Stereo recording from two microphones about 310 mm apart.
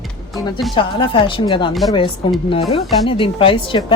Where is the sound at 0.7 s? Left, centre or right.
Centre.